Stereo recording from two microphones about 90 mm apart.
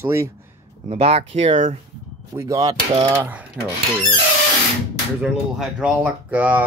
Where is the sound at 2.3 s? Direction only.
35° right (ahead or behind).